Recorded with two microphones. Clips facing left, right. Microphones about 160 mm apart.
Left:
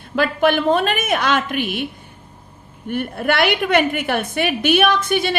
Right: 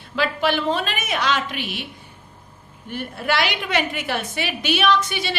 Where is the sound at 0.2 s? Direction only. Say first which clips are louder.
Left 5 dB; 50° left (ahead or behind).